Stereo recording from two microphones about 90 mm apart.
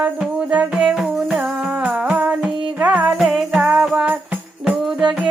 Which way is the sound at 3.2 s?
5° right (ahead or behind).